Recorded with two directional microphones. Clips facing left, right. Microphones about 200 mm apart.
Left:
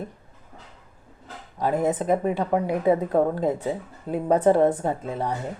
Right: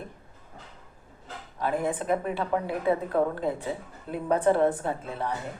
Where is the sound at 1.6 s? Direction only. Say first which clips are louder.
Left 5 dB; 45° left (ahead or behind).